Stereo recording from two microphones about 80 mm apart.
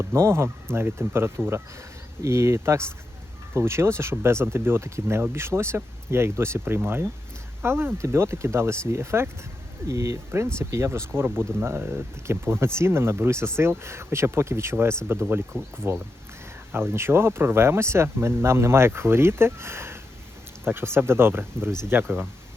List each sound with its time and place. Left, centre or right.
0.0 s speech: right